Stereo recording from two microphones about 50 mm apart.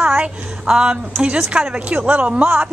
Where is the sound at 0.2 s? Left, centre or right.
Centre.